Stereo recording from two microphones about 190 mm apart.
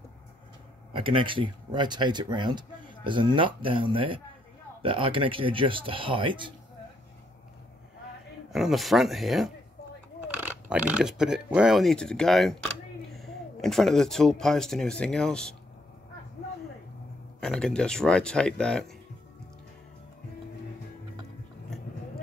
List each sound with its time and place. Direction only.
0.9 s speech: 25° right (ahead or behind)
8.5 s speech: centre (ahead or behind)
17.4 s speech: 5° left (ahead or behind)